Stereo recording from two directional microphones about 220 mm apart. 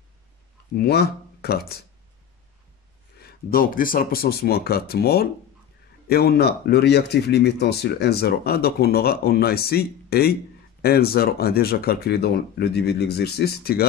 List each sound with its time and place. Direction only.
0.7 s speech: 45° left (ahead or behind)
3.2 s speech: 40° left (ahead or behind)